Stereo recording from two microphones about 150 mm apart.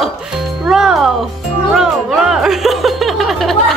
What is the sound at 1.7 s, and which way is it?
Music, centre (ahead or behind).